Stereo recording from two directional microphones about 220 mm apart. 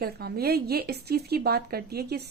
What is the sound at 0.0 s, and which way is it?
A woman's voice, 45° right (ahead or behind).